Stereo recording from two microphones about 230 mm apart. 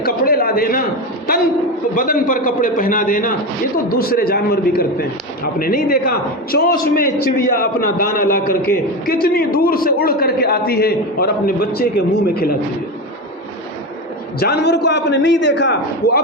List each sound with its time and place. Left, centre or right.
0.0 s a sound: left
2.0 s a man's voice: left
14.3 s a man's voice: left